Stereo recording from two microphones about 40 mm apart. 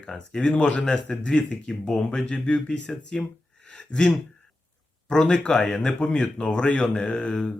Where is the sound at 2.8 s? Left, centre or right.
Centre.